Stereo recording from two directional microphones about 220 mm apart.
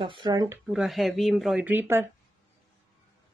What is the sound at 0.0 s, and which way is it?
Speech, 20° right (ahead or behind).